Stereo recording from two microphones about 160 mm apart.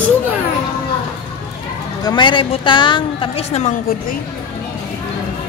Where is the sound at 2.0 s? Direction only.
30° left (ahead or behind).